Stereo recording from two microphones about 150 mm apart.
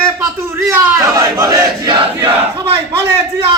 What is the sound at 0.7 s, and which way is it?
Battle cry, 20° right (ahead or behind).